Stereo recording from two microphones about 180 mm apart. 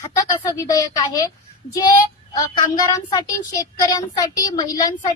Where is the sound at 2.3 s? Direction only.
20° left (ahead or behind).